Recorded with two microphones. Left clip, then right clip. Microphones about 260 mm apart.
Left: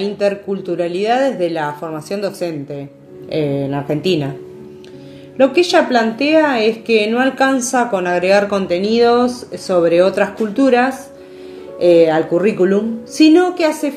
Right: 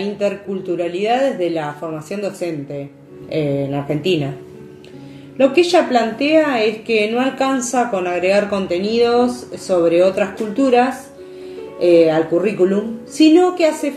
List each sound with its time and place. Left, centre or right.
0.0 s a woman's voice: left
5.4 s a woman's voice: left